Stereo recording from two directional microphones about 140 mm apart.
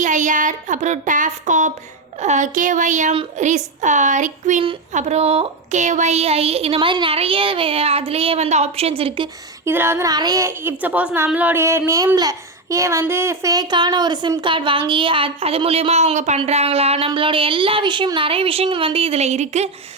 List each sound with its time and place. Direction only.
0.0 s a sound: 65° right (ahead or behind)
2.2 s speech: 60° right (ahead or behind)
4.9 s speech: 50° right (ahead or behind)
9.6 s a woman's voice: 15° right (ahead or behind); by 19.7 s 55° right (ahead or behind)